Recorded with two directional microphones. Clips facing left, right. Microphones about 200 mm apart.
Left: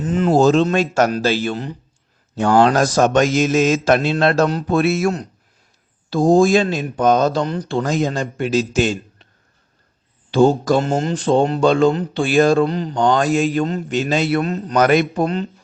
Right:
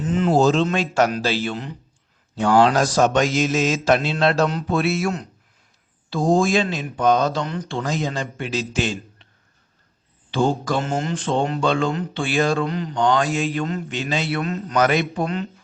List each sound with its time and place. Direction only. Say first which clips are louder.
0.0 s speech: left 3 dB; 45° left (ahead or behind)
10.3 s speech: left 7 dB; 40° left (ahead or behind)